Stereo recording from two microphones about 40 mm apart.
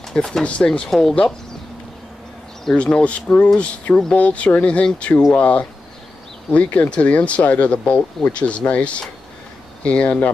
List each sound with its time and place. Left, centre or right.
0.1 s speech: centre
2.7 s speech: left
6.5 s speech: left